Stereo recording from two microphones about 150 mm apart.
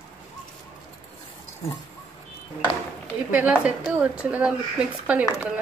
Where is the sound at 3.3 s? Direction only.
10° right (ahead or behind).